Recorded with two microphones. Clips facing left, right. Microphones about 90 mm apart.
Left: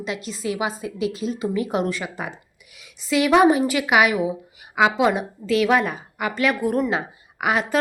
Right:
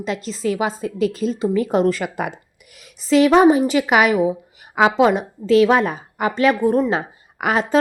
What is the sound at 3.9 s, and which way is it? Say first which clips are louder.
A woman's voice: right 1 dB; 35° right (ahead or behind).